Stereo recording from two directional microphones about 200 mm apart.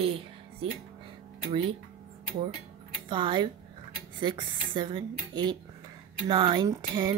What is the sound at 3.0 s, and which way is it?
Speech, 25° right (ahead or behind).